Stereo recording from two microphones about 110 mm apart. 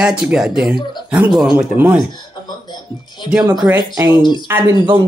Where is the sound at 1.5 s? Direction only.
15° right (ahead or behind).